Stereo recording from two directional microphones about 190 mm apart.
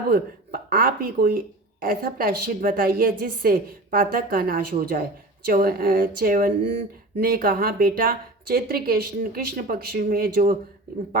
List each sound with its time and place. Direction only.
0.1 s speech: 50° right (ahead or behind)